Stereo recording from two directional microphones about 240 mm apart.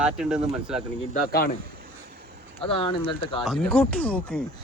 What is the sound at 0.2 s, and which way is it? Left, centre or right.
Speech, centre.